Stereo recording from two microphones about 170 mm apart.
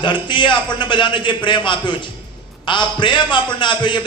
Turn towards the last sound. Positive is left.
turn(degrees=25)  # may be behind; listen again after turning